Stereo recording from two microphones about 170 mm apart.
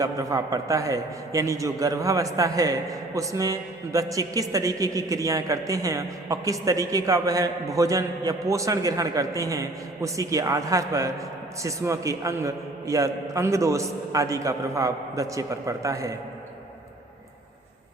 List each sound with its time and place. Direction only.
0.0 s a man's voice: 20° right (ahead or behind)